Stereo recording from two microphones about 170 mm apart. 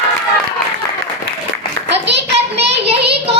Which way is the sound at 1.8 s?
90° right.